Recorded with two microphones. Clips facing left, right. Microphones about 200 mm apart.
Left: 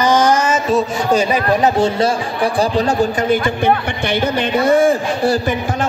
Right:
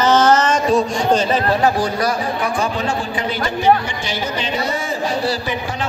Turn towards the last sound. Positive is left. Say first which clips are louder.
# left 6 dB
turn(degrees=50)  # may be behind; listen again after turning